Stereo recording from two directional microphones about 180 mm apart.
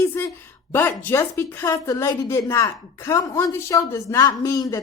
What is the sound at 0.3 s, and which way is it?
A woman's voice, 10° left (ahead or behind).